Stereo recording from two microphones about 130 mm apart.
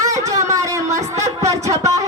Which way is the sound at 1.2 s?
25° right (ahead or behind).